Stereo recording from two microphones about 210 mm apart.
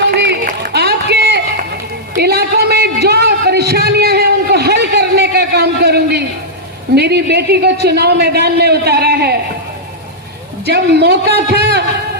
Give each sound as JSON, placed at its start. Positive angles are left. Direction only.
{"t": 0.1, "sound": "a sound", "side_deg": -50}
{"t": 6.9, "sound": "a man's voice", "side_deg": -50}
{"t": 10.7, "sound": "a man's voice", "side_deg": -50}